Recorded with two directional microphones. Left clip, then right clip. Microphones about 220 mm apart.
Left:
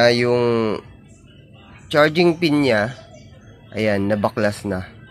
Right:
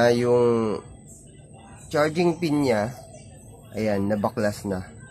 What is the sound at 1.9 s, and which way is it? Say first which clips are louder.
Speech: left 7 dB; 15° left (ahead or behind).